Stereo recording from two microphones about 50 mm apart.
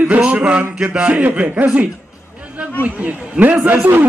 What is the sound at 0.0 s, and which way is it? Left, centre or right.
A man's voice, right.